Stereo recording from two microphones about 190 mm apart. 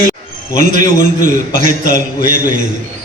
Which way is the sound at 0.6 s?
40° right (ahead or behind).